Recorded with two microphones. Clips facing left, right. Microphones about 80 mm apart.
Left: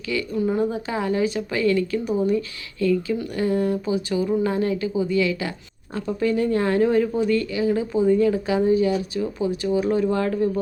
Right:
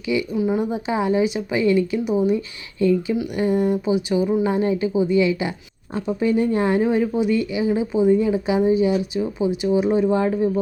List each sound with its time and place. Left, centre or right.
0.0 s a woman's voice: centre